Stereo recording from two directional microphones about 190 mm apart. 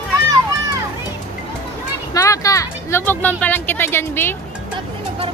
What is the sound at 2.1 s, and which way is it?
Speech, 15° left (ahead or behind).